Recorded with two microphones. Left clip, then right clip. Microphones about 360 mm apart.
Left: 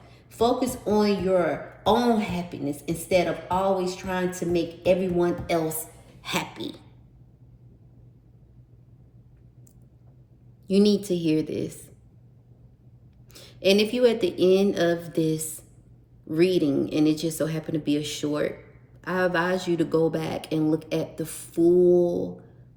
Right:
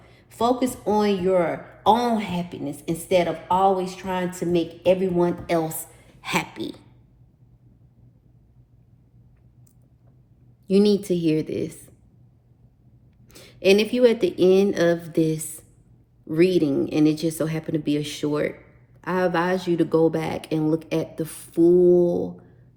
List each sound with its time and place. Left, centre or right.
0.3 s speech: right
10.7 s speech: centre
13.3 s speech: centre